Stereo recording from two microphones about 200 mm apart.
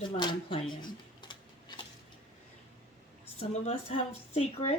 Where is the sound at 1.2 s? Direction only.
20° left (ahead or behind).